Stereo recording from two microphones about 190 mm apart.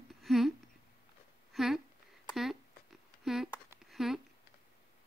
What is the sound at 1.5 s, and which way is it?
Speech, centre (ahead or behind).